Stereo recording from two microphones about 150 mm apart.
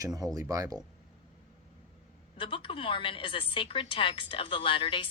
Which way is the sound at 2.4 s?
35° left (ahead or behind).